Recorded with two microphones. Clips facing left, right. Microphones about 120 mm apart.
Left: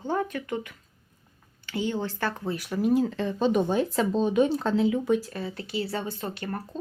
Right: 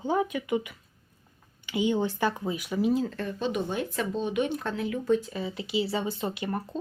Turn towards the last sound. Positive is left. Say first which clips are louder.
# right 2 dB
turn(degrees=-15)  # may be behind; listen again after turning